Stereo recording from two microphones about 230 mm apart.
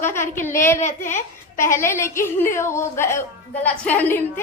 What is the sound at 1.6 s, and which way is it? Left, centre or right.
A woman's voice, centre.